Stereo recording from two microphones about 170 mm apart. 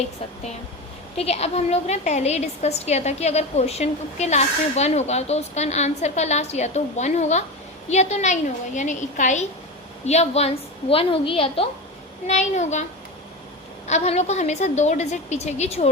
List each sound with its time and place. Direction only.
1.1 s a woman's voice: 35° left (ahead or behind)
12.3 s a woman's voice: 45° left (ahead or behind)
13.8 s a woman's voice: 40° left (ahead or behind)